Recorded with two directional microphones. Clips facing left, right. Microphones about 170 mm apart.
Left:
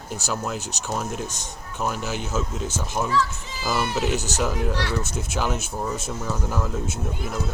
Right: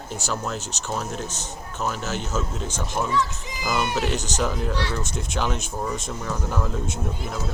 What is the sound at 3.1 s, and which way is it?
Speech, 20° right (ahead or behind).